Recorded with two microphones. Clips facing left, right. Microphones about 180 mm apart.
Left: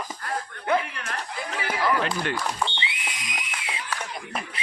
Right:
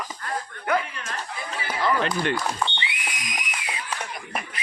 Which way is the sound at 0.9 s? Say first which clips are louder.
Left 1 dB; 65° left (ahead or behind).